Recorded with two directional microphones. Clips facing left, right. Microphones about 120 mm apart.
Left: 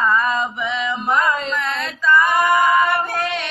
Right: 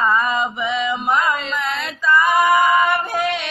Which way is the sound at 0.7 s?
Centre (ahead or behind).